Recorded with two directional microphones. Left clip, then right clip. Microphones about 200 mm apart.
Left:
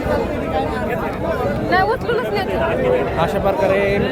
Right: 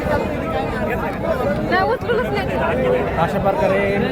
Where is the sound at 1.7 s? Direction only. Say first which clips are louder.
Left 2 dB; 50° left (ahead or behind).